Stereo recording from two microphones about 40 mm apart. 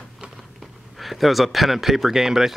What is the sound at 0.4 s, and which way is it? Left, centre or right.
Speech, centre.